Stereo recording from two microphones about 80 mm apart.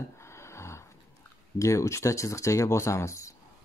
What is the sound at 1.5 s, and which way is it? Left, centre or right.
Speech, left.